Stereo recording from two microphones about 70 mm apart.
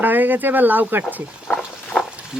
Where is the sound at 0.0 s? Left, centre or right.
Right.